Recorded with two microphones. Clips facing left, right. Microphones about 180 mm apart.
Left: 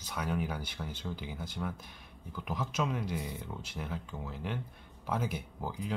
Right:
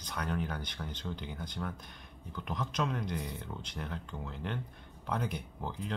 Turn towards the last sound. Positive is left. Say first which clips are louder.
# left 1 dB
turn(degrees=5)  # may be behind; listen again after turning